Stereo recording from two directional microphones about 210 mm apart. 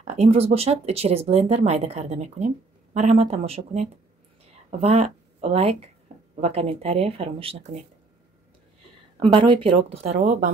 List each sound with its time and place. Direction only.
0.0 s speech: 30° right (ahead or behind)
6.1 s a sound: 30° right (ahead or behind)
6.4 s speech: 30° right (ahead or behind)
9.2 s speech: 25° right (ahead or behind)